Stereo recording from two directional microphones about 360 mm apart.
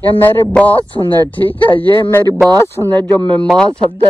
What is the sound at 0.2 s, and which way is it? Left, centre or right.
Speech, centre.